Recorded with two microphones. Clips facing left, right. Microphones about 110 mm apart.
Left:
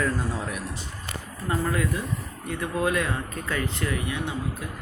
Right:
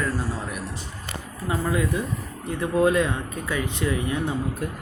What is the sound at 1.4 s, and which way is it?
Speech, 20° right (ahead or behind).